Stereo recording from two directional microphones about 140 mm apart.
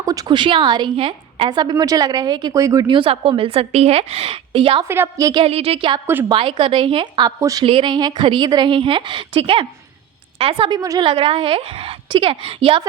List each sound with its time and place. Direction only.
0.0 s a woman's voice: 25° right (ahead or behind); by 4.9 s 40° right (ahead or behind)
4.9 s a woman's voice: 20° right (ahead or behind)
5.4 s a woman's voice: 45° right (ahead or behind); by 7.6 s 25° right (ahead or behind)
7.6 s a woman's voice: 40° right (ahead or behind)
10.8 s a woman's voice: 25° right (ahead or behind)
11.1 s a woman's voice: 40° right (ahead or behind)